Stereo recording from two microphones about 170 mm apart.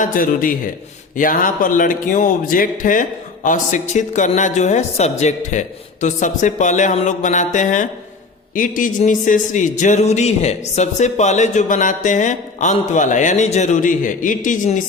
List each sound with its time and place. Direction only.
0.0 s a man's voice: 55° left (ahead or behind)